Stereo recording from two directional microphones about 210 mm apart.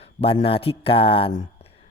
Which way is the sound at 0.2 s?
25° left (ahead or behind).